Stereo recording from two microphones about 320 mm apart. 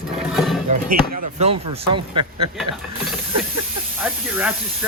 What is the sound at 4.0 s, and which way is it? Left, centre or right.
Speech, centre.